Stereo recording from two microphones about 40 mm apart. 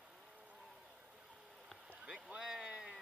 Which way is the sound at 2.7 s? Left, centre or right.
Right.